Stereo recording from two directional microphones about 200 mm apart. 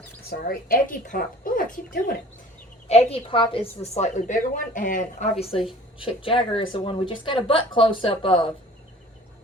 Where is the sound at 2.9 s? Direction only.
30° left (ahead or behind).